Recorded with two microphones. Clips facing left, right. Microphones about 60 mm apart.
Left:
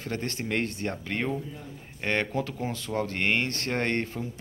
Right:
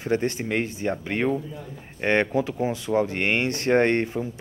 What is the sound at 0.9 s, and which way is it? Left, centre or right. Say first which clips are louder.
Speech: right 6 dB; centre.